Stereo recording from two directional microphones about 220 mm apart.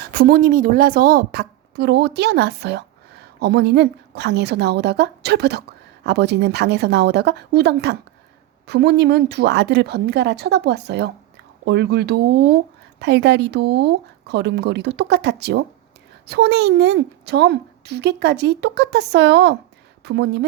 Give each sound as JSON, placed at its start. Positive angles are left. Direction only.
{"t": 0.0, "sound": "a woman's voice", "side_deg": -45}